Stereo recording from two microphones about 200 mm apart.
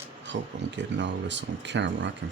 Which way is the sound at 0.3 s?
65° right (ahead or behind).